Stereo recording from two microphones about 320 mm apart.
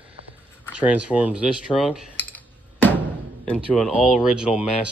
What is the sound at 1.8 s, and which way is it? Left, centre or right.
Computer keyboard, centre.